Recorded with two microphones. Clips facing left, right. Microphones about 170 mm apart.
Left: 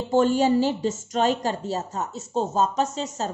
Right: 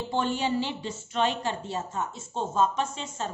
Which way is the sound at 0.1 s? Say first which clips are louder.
Left 9 dB; 40° left (ahead or behind).